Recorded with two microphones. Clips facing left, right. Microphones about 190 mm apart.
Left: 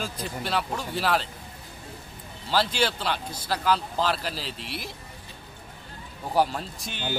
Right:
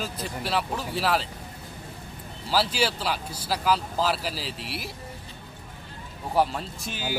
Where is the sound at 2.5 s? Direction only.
5° right (ahead or behind).